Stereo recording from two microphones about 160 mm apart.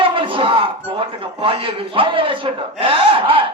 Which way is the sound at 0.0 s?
35° right (ahead or behind).